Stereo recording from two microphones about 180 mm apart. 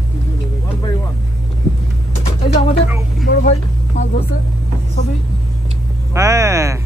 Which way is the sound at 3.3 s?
50° left (ahead or behind).